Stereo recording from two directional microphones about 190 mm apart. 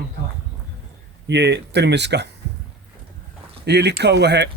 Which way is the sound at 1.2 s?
65° right (ahead or behind).